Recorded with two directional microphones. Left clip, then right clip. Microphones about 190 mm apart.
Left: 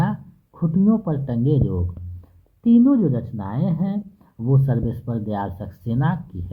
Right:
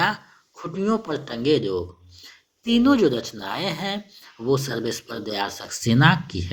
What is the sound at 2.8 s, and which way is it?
Speech, 40° right (ahead or behind).